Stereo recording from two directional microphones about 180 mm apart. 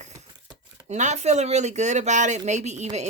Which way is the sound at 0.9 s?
40° right (ahead or behind).